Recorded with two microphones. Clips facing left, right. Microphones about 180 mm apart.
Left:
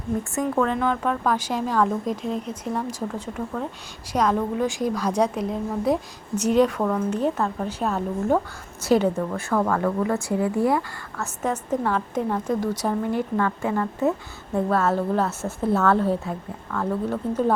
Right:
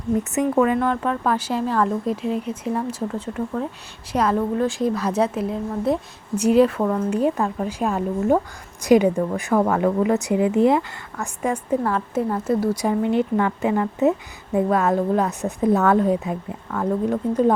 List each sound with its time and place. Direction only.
0.3 s a woman's voice: 15° right (ahead or behind)